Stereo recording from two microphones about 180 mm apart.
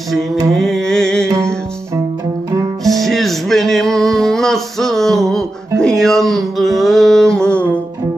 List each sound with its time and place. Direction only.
0.6 s music: centre (ahead or behind)
2.8 s music: centre (ahead or behind)